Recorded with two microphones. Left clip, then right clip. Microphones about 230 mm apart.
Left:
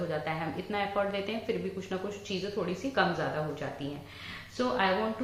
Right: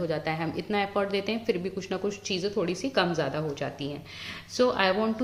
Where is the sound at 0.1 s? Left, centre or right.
Right.